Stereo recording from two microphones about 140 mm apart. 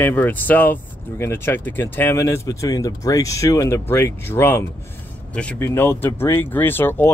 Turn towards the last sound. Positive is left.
turn(degrees=15)  # may be behind; listen again after turning